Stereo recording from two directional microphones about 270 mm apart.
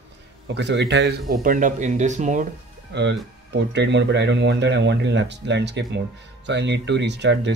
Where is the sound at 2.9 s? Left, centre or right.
Right.